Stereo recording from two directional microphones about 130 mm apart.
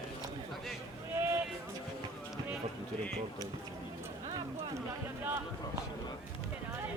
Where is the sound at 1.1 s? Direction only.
20° right (ahead or behind).